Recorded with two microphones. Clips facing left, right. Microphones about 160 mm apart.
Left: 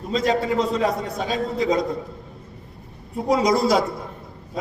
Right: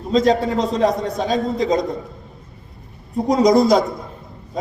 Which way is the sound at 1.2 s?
40° right (ahead or behind).